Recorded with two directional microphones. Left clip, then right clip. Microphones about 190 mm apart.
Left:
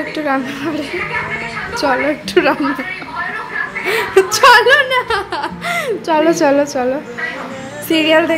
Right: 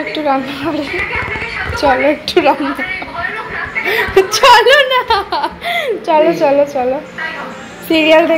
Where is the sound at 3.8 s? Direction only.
25° left (ahead or behind).